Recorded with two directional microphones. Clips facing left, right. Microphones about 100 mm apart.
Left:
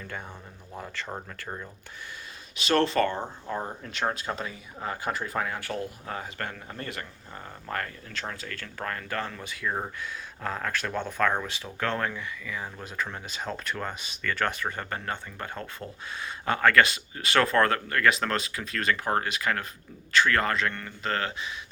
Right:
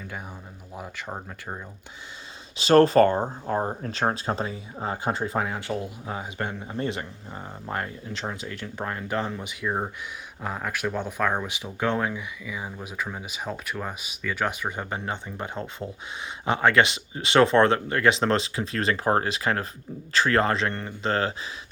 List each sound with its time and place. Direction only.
0.7 s speech: 15° right (ahead or behind)
2.6 s speech: 35° right (ahead or behind)